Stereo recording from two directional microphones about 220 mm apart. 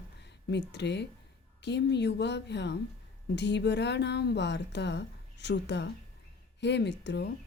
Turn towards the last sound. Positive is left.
turn(degrees=50)  # may be behind; listen again after turning